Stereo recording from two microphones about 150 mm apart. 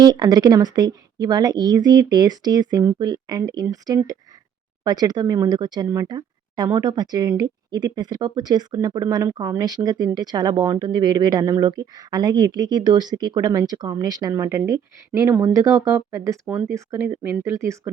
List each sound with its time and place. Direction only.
0.0 s speech: 25° right (ahead or behind)